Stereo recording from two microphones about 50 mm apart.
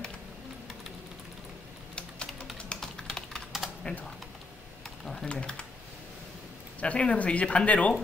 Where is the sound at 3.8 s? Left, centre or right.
Left.